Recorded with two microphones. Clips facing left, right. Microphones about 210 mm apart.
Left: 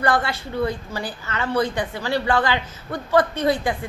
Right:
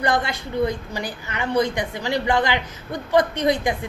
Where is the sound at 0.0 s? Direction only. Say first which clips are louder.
Left 1 dB; 15° right (ahead or behind).